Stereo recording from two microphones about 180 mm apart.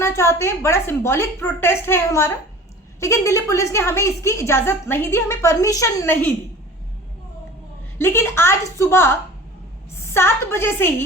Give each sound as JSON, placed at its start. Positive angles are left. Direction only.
{"t": 0.0, "sound": "a woman's voice", "side_deg": 15}
{"t": 7.9, "sound": "a woman's voice", "side_deg": 10}